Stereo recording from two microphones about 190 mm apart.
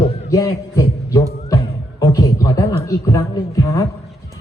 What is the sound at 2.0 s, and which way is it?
Music, 15° left (ahead or behind).